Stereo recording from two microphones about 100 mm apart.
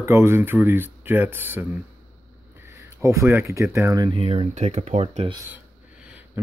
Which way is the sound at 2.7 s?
30° right (ahead or behind).